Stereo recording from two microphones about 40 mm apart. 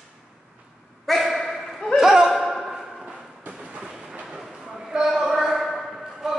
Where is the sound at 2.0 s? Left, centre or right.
Centre.